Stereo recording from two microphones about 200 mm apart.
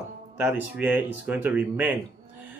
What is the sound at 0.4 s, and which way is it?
Speech, 10° right (ahead or behind).